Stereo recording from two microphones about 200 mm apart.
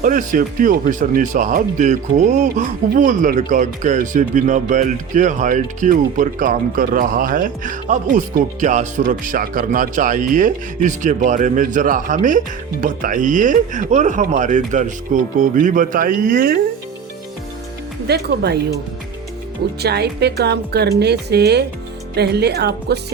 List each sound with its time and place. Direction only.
0.0 s speech: 40° right (ahead or behind)
18.1 s speech: 55° right (ahead or behind)
19.8 s speech: 55° right (ahead or behind)